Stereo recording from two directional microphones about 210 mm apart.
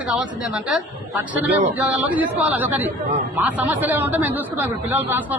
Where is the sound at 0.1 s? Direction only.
5° right (ahead or behind).